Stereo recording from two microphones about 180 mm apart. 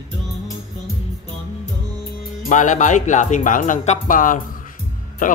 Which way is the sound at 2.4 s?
45° left (ahead or behind).